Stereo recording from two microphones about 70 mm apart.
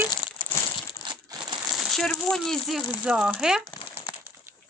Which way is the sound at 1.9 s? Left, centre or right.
Centre.